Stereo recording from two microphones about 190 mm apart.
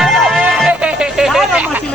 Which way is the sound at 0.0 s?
Centre (ahead or behind).